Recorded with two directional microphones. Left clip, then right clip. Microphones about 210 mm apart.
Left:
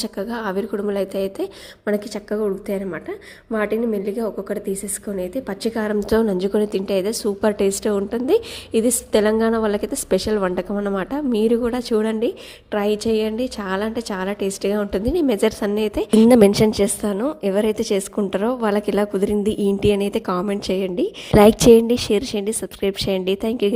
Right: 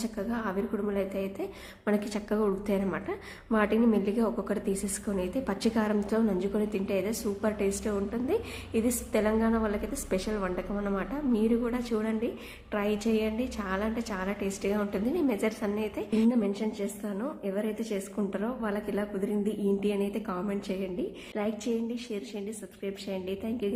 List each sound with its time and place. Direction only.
0.0 s a woman's voice: 40° left (ahead or behind)
1.8 s a woman's voice: 25° left (ahead or behind)
16.3 s a woman's voice: 50° left (ahead or behind)